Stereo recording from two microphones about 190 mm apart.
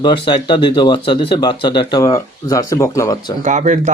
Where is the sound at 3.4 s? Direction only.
40° right (ahead or behind).